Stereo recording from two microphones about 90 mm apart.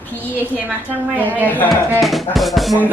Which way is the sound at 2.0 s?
Centre (ahead or behind).